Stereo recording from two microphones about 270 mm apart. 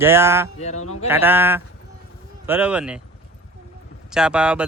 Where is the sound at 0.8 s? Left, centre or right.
Left.